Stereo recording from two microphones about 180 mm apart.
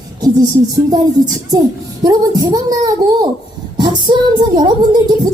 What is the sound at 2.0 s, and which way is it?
Speech, 20° right (ahead or behind).